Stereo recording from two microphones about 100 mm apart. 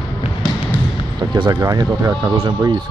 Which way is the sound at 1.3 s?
40° right (ahead or behind).